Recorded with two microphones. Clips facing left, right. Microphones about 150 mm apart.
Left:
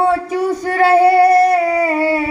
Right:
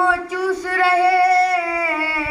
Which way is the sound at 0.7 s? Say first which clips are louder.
Left 7 dB; 45° left (ahead or behind).